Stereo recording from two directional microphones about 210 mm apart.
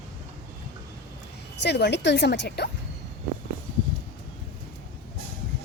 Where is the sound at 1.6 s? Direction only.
55° left (ahead or behind).